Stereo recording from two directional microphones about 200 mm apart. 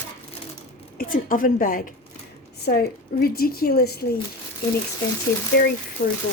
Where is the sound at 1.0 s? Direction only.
45° left (ahead or behind).